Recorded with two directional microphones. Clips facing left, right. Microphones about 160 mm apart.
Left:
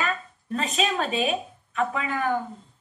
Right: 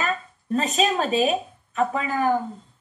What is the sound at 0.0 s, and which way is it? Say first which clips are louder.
A woman's voice: right 2 dB; 35° right (ahead or behind).